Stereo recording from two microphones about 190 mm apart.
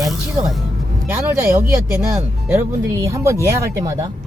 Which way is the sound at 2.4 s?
15° right (ahead or behind).